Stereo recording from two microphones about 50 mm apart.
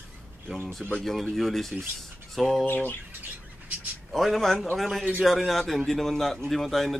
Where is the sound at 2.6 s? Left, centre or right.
Left.